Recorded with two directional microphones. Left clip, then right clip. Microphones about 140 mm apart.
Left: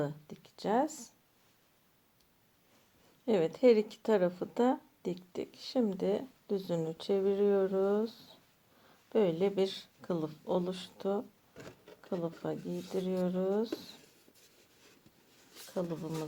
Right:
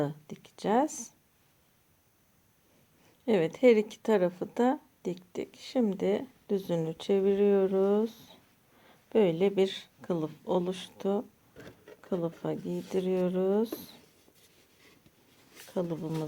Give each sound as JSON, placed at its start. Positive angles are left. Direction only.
{"t": 0.0, "sound": "speech", "side_deg": -40}
{"t": 3.2, "sound": "speech", "side_deg": -30}
{"t": 11.5, "sound": "a sound", "side_deg": -15}
{"t": 12.0, "sound": "speech", "side_deg": -40}
{"t": 15.5, "sound": "speech", "side_deg": -40}